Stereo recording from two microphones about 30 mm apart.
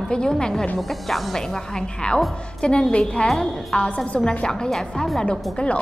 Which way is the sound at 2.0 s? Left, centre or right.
Left.